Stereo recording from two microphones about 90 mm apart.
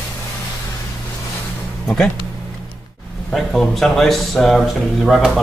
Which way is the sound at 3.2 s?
10° left (ahead or behind).